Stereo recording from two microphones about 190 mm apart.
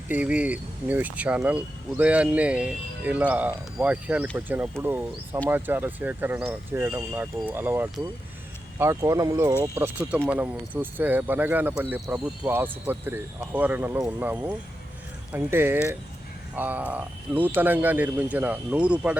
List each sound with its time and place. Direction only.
0.1 s speech: 5° right (ahead or behind)